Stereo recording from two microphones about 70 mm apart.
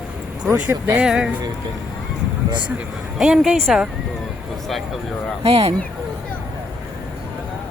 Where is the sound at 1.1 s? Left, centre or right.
Centre.